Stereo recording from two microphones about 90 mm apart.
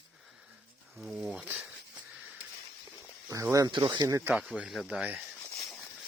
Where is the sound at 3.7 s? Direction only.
60° right (ahead or behind).